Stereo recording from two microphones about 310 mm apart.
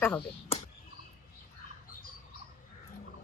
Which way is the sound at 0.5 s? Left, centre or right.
Centre.